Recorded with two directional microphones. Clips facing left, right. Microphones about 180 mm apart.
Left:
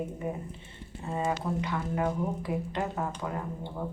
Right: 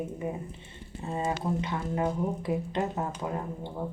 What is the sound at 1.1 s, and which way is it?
Speech, 25° right (ahead or behind).